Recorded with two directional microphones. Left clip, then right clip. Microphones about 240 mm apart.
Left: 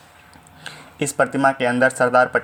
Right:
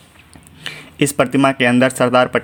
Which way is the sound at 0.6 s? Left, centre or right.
Right.